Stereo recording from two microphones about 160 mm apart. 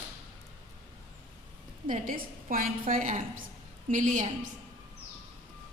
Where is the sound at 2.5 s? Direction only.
60° right (ahead or behind).